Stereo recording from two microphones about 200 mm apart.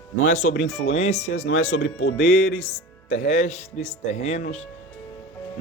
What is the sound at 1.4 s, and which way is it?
Speech, 80° left.